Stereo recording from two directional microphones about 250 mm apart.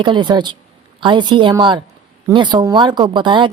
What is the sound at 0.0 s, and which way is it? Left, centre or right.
Speech, centre.